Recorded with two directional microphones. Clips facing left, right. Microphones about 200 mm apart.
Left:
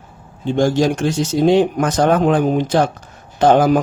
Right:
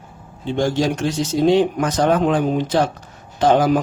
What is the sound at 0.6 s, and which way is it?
Speech, 45° left (ahead or behind).